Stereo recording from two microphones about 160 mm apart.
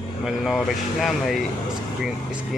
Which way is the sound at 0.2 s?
Centre (ahead or behind).